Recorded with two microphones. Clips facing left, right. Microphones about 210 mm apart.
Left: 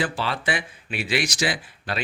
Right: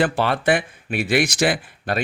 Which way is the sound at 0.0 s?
55° right (ahead or behind).